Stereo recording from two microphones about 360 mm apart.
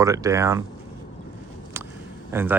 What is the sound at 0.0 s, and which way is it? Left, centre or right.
Speech, centre.